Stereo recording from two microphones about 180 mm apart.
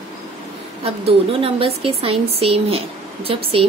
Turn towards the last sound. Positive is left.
turn(degrees=-30)  # may be behind; listen again after turning